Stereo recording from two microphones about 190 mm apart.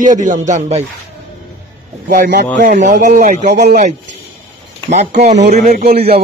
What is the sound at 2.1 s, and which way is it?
A man's voice, 50° right (ahead or behind).